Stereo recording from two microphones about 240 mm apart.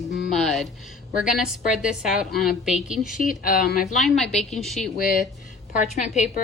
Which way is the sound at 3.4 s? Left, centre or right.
Left.